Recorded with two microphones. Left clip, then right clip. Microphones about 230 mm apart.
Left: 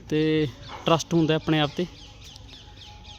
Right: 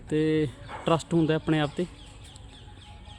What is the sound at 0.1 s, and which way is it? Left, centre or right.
Speech, centre.